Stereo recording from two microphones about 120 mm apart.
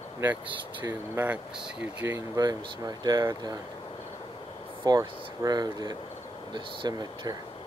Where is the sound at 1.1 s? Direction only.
15° right (ahead or behind).